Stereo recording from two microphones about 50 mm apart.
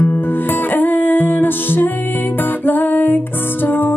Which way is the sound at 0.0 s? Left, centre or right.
Left.